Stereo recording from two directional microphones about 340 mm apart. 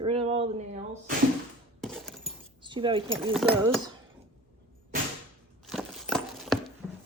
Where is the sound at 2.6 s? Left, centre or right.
Centre.